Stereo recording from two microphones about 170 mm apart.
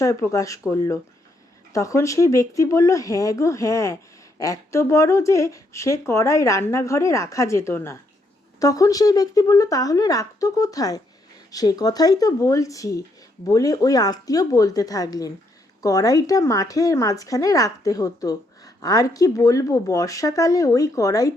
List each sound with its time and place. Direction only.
0.0 s speech: 20° left (ahead or behind)